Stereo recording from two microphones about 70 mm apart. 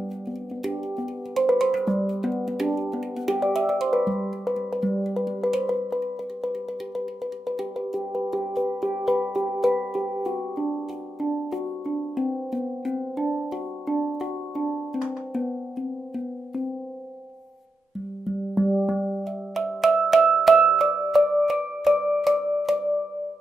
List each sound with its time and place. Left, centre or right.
0.7 s music: centre
18.2 s music: centre